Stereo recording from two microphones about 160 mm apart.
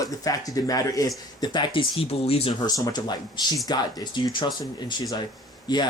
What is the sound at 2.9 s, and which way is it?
Speech, 25° left (ahead or behind).